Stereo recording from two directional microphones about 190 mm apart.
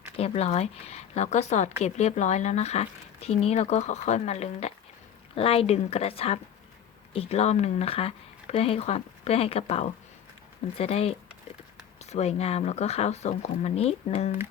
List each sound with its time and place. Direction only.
0.2 s speech: 35° left (ahead or behind)